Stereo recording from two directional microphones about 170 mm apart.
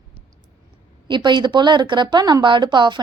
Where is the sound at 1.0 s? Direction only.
25° right (ahead or behind).